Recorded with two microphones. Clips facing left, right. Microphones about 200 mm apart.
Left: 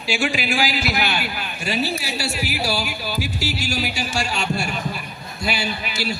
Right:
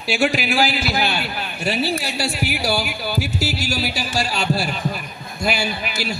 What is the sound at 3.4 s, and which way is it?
Speech, 40° right (ahead or behind).